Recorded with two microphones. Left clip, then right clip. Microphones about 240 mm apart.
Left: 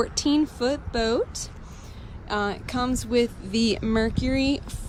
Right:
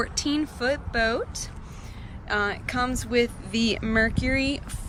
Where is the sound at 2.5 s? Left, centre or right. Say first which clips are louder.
Right 1 dB; centre.